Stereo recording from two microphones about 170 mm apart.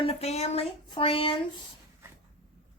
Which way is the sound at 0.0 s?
35° left (ahead or behind).